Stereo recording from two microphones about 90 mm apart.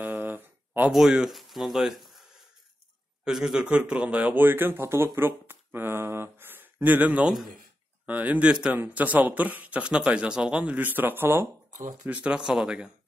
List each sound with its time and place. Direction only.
0.0 s a sound: 20° right (ahead or behind)
0.9 s speech: 5° right (ahead or behind)
3.3 s a man's voice: 5° right (ahead or behind)
7.2 s a man's voice: centre (ahead or behind)
8.1 s speech: 15° right (ahead or behind)
12.1 s speech: 10° right (ahead or behind)